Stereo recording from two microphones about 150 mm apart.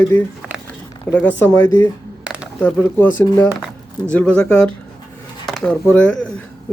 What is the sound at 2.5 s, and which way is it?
Speech, 10° left (ahead or behind).